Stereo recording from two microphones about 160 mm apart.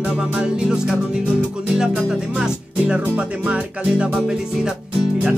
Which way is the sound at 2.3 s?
5° right (ahead or behind).